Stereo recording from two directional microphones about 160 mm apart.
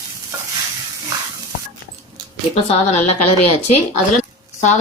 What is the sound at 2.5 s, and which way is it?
Speech, 40° left (ahead or behind).